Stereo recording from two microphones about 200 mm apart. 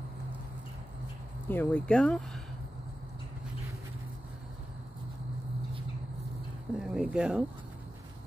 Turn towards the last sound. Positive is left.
turn(degrees=-5)  # may be behind; listen again after turning